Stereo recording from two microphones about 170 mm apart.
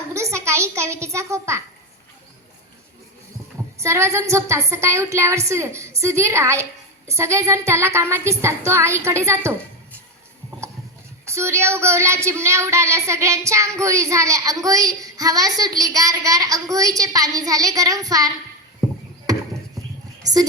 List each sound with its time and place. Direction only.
0.1 s a sound: 15° right (ahead or behind)
3.8 s a woman's voice: 15° right (ahead or behind)
11.3 s speech: 15° right (ahead or behind)
20.2 s speech: 20° right (ahead or behind)